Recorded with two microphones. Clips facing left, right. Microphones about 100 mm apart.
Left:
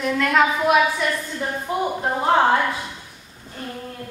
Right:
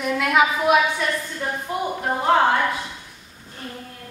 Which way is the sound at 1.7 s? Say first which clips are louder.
Left 3 dB; 25° left (ahead or behind).